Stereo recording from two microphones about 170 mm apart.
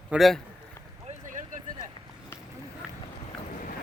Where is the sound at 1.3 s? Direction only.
50° right (ahead or behind).